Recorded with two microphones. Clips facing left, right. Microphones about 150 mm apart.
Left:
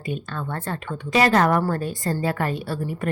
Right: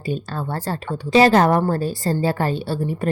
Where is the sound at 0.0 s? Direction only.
35° right (ahead or behind).